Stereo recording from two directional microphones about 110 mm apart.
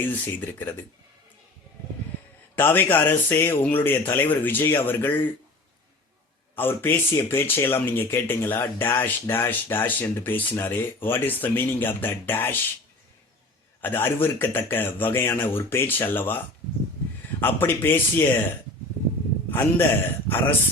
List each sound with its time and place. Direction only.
0.0 s speech: 20° left (ahead or behind)
2.6 s speech: 20° left (ahead or behind)
6.6 s speech: 20° left (ahead or behind)
13.8 s speech: 20° left (ahead or behind)
17.4 s speech: 20° left (ahead or behind)
19.5 s a man's voice: 20° left (ahead or behind)